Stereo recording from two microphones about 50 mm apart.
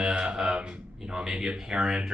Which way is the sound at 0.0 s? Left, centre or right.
Centre.